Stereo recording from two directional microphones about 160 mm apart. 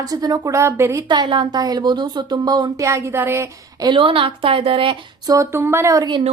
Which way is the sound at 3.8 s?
35° right (ahead or behind).